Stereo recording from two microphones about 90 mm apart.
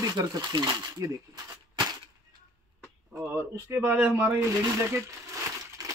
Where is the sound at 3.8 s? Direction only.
20° right (ahead or behind).